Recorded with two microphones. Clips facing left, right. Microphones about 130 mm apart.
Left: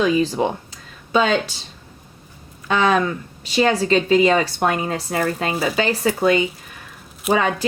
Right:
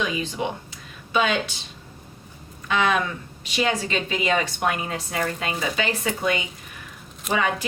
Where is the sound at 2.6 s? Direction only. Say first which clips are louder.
Left 5 dB; 35° left (ahead or behind).